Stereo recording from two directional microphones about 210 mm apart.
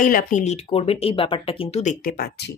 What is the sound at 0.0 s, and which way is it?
A woman's voice, 40° left (ahead or behind).